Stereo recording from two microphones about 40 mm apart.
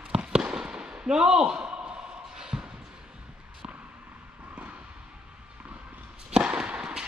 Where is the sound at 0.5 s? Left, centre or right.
Centre.